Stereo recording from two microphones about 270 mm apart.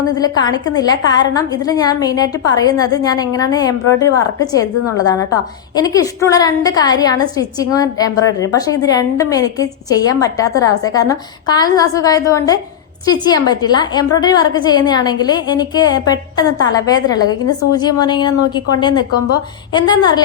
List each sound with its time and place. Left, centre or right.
0.2 s a woman's voice: centre